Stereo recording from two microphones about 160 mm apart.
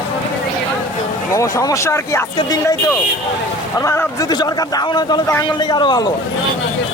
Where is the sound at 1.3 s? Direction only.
20° left (ahead or behind).